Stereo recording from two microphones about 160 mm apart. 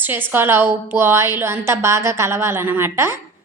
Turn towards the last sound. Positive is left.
turn(degrees=-15)  # may be behind; listen again after turning